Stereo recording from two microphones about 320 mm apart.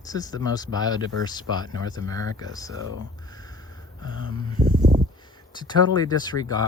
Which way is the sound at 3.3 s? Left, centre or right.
Centre.